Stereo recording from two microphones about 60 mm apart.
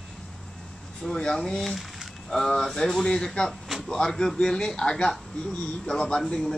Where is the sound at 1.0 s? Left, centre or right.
Centre.